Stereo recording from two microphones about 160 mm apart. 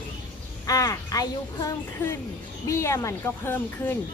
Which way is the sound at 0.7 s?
20° left (ahead or behind).